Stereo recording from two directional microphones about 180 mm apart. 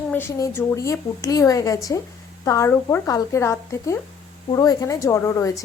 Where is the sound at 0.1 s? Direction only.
15° left (ahead or behind).